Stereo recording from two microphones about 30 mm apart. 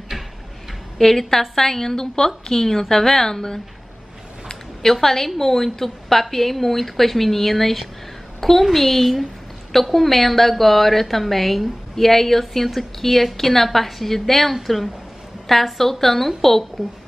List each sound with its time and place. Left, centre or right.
0.1 s tick-tock: centre
0.9 s speech: centre
5.0 s a woman's voice: centre